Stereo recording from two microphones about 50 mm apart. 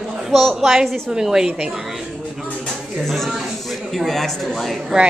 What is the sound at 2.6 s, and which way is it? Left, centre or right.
Speech, centre.